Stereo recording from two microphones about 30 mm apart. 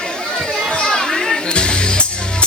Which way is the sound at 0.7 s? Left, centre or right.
Left.